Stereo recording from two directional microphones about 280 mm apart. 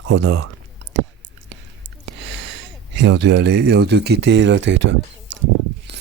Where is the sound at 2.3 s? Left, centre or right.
Right.